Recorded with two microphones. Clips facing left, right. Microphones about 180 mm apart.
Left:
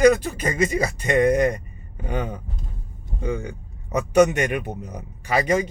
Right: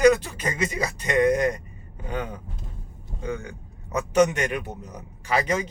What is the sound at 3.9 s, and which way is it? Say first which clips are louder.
A man's voice: left 3 dB; 10° left (ahead or behind).